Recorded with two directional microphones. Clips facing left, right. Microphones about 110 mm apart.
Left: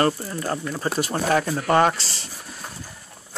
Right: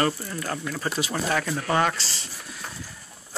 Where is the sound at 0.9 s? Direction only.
50° left (ahead or behind).